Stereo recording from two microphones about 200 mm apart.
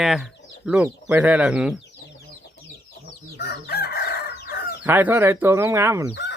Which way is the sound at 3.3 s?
50° left (ahead or behind).